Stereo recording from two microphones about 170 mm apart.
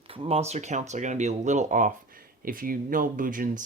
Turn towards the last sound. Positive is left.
turn(degrees=-50)  # may be behind; listen again after turning